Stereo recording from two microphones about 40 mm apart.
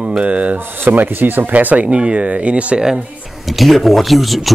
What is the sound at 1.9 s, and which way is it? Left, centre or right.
Speech, right.